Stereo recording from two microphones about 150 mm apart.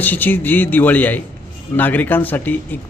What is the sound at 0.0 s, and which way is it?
Speech, 10° left (ahead or behind).